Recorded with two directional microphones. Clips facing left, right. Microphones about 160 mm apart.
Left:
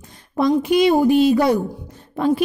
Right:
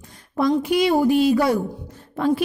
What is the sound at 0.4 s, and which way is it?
Speech, 20° left (ahead or behind).